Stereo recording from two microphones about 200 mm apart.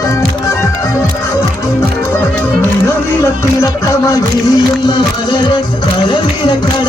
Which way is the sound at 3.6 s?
15° left (ahead or behind).